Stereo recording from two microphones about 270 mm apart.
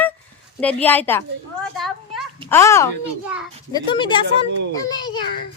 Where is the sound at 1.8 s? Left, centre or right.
Centre.